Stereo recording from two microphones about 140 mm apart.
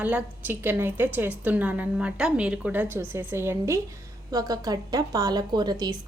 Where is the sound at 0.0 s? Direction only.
10° right (ahead or behind).